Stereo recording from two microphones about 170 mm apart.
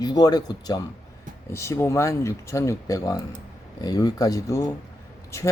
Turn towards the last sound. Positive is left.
turn(degrees=15)  # may be behind; listen again after turning